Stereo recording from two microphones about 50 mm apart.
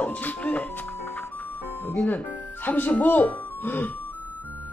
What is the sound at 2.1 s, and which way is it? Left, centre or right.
Speech, left.